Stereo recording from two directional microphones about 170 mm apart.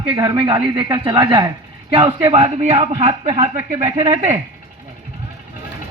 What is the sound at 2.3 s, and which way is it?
Speech, 40° right (ahead or behind).